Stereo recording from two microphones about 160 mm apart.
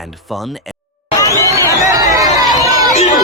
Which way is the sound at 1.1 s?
20° left (ahead or behind).